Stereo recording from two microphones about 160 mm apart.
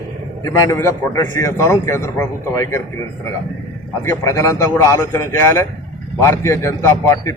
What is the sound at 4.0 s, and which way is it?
A man's voice, 20° left (ahead or behind).